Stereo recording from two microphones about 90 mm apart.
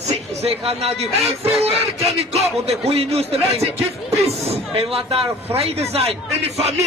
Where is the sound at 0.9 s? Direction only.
90° right.